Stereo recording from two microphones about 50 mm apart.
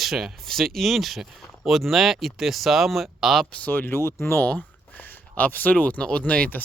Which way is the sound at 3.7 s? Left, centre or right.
Left.